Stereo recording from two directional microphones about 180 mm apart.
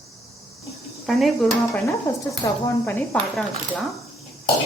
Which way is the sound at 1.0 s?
Centre (ahead or behind).